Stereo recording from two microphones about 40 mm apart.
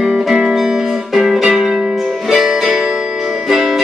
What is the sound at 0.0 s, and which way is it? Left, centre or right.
Music, centre.